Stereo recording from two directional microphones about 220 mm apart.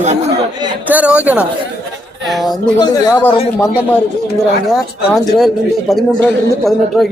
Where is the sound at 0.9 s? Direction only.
5° right (ahead or behind).